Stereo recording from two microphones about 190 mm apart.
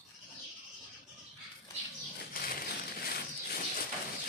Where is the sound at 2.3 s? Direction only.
50° left (ahead or behind).